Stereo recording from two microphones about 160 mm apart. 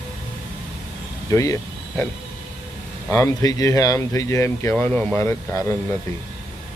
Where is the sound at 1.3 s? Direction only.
20° left (ahead or behind).